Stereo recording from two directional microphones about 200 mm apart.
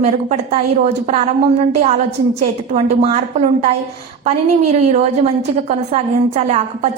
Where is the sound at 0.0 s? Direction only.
35° right (ahead or behind).